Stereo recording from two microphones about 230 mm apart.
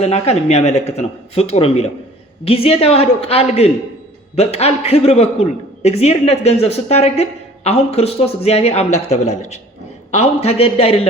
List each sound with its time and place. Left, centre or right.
0.0 s a man's voice: left